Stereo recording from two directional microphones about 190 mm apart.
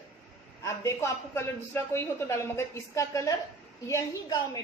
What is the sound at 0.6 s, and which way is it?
A man's voice, 15° left (ahead or behind).